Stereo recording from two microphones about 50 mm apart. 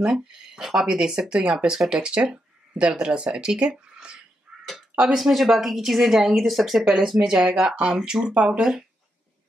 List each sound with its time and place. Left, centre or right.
0.0 s speech: centre
4.5 s crow: centre
5.0 s speech: centre